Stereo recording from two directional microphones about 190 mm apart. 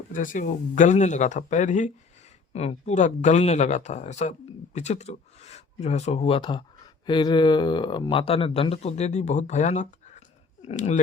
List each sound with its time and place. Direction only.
0.1 s speech: 45° left (ahead or behind)